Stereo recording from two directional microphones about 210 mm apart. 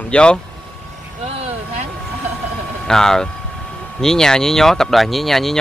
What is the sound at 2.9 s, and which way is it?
Speech, 5° left (ahead or behind).